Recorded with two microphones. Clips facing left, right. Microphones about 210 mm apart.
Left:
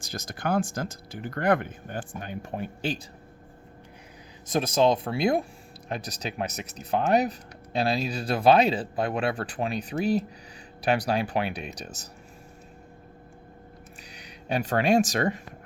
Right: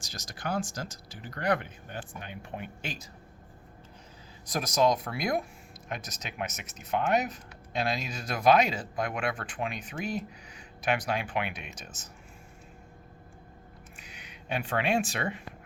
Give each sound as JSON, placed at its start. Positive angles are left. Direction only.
{"t": 0.0, "sound": "speech", "side_deg": 55}
{"t": 4.4, "sound": "speech", "side_deg": 25}
{"t": 14.0, "sound": "speech", "side_deg": 35}